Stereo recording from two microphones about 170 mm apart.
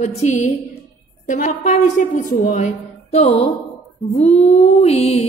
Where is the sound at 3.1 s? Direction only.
35° left (ahead or behind).